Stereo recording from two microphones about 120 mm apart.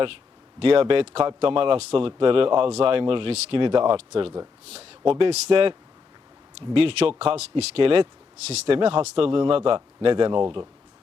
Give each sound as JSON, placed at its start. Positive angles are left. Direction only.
{"t": 0.6, "sound": "a man's voice", "side_deg": -50}
{"t": 6.7, "sound": "speech", "side_deg": -55}